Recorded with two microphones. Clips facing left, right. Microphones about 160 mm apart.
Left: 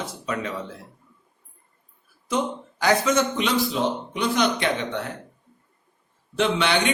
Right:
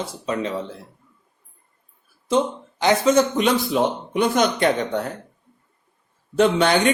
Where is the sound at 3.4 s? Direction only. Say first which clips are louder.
Right 4 dB; 50° right (ahead or behind).